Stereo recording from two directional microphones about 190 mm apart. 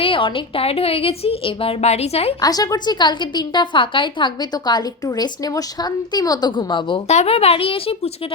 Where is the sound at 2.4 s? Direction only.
20° left (ahead or behind).